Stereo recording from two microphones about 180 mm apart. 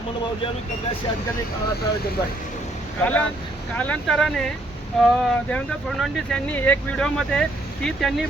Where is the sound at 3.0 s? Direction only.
10° left (ahead or behind).